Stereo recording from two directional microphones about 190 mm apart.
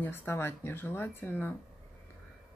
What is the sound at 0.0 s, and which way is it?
Speech, 10° left (ahead or behind).